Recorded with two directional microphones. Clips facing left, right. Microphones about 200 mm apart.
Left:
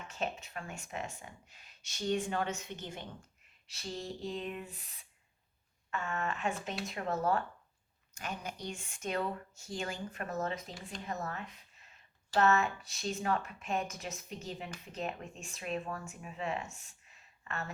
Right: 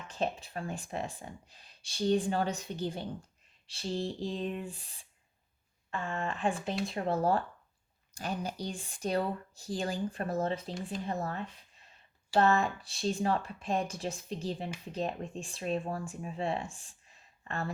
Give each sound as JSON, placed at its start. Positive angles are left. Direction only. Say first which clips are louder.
{"t": 0.1, "sound": "speech", "louder": "right 5 dB", "side_deg": -35}